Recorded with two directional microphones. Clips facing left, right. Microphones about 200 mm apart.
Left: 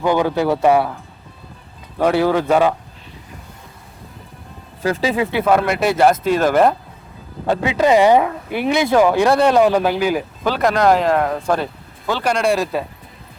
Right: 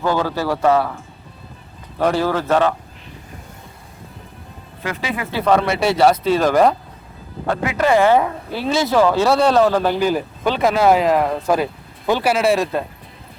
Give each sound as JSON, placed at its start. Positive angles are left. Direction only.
{"t": 0.0, "sound": "speech", "side_deg": 15}
{"t": 2.0, "sound": "speech", "side_deg": 10}
{"t": 4.8, "sound": "speech", "side_deg": 35}
{"t": 5.5, "sound": "speech", "side_deg": 5}
{"t": 7.4, "sound": "speech", "side_deg": 20}
{"t": 12.0, "sound": "speech", "side_deg": -15}
{"t": 12.3, "sound": "speech", "side_deg": -5}